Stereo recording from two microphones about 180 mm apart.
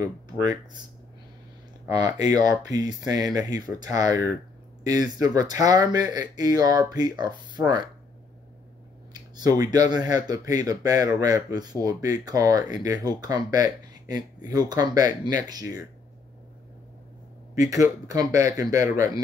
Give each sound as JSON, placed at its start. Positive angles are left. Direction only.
{"t": 0.0, "sound": "speech", "side_deg": -20}
{"t": 1.9, "sound": "speech", "side_deg": -20}
{"t": 5.2, "sound": "speech", "side_deg": -20}
{"t": 9.1, "sound": "speech", "side_deg": -20}
{"t": 17.6, "sound": "speech", "side_deg": -20}